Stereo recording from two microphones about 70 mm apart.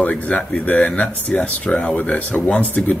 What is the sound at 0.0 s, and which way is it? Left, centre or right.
Speech, left.